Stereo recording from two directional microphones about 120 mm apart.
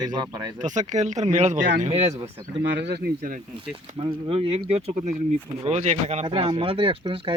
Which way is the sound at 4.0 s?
50° right (ahead or behind).